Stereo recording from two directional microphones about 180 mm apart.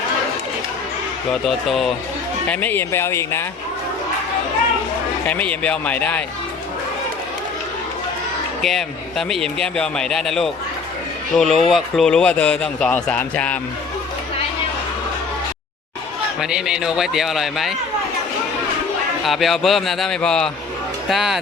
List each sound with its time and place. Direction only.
1.3 s speech: centre (ahead or behind)
2.5 s speech: 10° left (ahead or behind)
5.2 s speech: 10° left (ahead or behind)
8.6 s speech: centre (ahead or behind)
16.4 s speech: 5° right (ahead or behind)
19.2 s speech: centre (ahead or behind)